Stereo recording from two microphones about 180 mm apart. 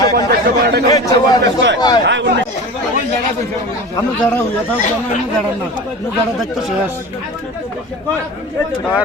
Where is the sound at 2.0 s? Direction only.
75° right (ahead or behind).